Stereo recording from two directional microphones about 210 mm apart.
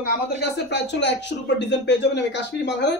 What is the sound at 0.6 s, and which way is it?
Speech, 55° left (ahead or behind).